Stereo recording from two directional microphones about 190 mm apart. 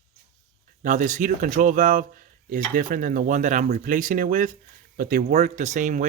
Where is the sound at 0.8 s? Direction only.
40° right (ahead or behind).